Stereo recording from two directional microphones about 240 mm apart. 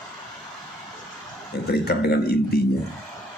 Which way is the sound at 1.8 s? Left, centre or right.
Left.